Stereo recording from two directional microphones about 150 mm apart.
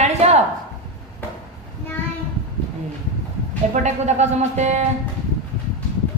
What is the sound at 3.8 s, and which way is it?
A woman's voice, 50° right (ahead or behind).